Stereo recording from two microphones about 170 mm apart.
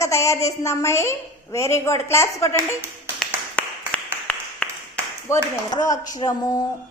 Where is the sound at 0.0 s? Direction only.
15° left (ahead or behind).